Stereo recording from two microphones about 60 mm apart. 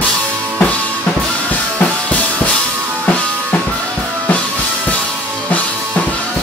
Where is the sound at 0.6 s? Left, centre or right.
Left.